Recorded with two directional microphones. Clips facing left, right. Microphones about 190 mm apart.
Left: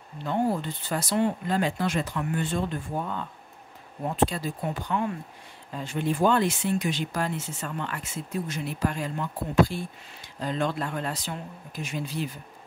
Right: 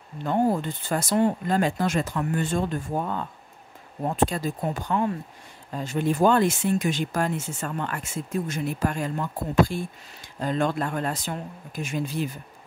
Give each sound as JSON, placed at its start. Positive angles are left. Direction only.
{"t": 0.2, "sound": "speech", "side_deg": -45}
{"t": 4.3, "sound": "speech", "side_deg": -45}